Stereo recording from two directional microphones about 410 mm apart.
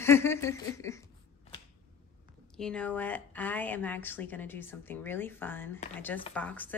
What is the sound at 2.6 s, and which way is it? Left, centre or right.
A woman's voice, centre.